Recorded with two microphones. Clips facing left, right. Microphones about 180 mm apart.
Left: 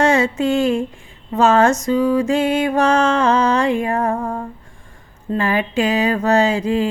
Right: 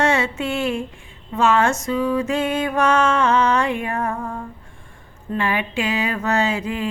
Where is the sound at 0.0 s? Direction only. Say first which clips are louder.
Left 5 dB; 35° left (ahead or behind).